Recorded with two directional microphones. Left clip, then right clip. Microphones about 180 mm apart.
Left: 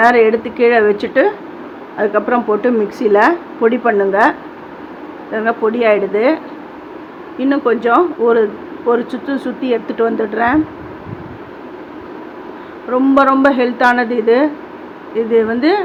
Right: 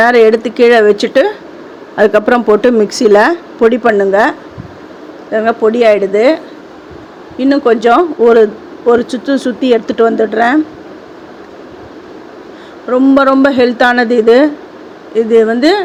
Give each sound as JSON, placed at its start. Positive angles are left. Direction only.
{"t": 0.0, "sound": "a woman's voice", "side_deg": -40}
{"t": 12.9, "sound": "a woman's voice", "side_deg": -30}